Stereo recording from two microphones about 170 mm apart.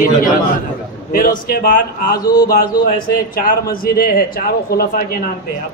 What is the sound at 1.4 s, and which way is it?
A man's voice, 60° left (ahead or behind).